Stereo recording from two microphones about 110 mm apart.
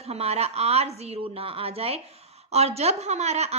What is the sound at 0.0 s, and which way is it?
A woman's voice, 70° right (ahead or behind).